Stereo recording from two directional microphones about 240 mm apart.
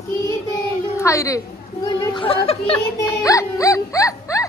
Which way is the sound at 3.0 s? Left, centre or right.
Centre.